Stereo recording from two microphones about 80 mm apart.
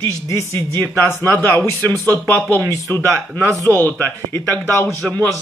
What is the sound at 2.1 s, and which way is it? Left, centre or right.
Speech, left.